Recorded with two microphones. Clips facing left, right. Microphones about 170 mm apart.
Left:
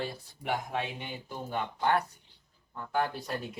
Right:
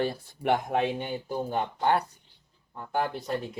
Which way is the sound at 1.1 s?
35° right (ahead or behind).